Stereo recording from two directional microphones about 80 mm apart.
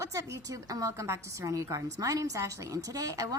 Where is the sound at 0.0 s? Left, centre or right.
Right.